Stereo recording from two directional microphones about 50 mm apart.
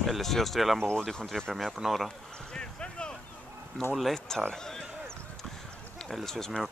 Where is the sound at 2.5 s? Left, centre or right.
Centre.